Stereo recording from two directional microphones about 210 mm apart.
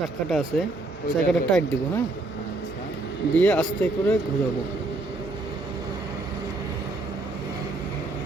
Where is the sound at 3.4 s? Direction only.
5° left (ahead or behind).